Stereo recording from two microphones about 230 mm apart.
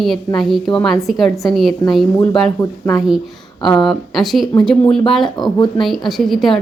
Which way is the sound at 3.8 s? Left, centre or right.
Centre.